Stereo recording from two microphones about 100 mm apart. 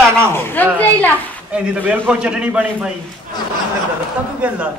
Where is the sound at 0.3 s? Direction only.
20° left (ahead or behind).